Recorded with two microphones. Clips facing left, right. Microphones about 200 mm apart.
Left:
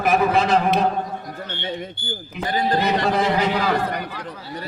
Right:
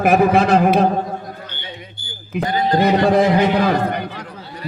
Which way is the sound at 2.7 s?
55° right (ahead or behind).